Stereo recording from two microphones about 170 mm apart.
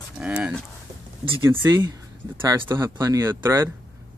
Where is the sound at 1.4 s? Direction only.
15° right (ahead or behind).